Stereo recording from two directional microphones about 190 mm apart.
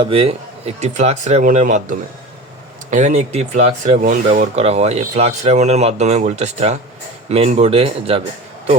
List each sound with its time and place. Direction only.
0.0 s speech: 30° right (ahead or behind)